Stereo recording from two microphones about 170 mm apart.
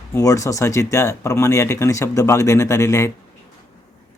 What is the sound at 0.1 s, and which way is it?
Speech, 20° left (ahead or behind).